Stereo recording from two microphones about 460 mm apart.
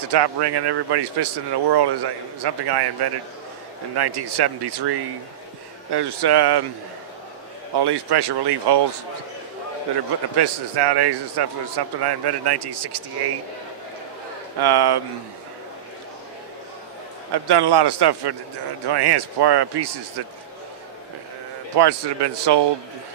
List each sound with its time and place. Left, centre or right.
0.1 s a man's voice: right
7.7 s a man's voice: right
10.3 s a man's voice: right
14.6 s a man's voice: right
17.3 s a man's voice: right
21.7 s a man's voice: right